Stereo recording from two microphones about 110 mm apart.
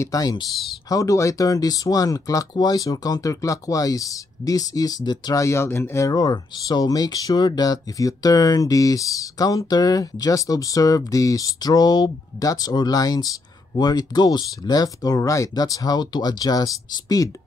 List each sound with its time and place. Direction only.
0.0 s speech: 35° left (ahead or behind)